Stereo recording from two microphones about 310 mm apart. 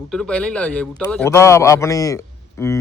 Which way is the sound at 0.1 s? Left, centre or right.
Centre.